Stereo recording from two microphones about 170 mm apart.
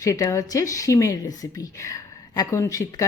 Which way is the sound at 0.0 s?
20° left (ahead or behind).